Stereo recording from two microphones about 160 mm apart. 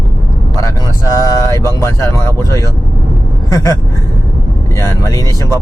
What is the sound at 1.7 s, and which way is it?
Speech, 20° left (ahead or behind).